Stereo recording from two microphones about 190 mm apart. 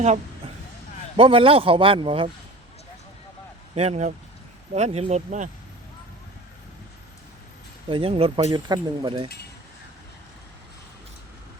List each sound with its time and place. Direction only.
0.0 s a sound: 35° right (ahead or behind)
1.1 s speech: 30° right (ahead or behind)
3.8 s speech: 35° right (ahead or behind)
7.9 s speech: 30° right (ahead or behind)